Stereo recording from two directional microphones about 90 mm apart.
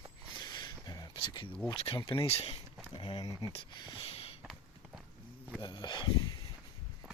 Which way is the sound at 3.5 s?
65° left (ahead or behind).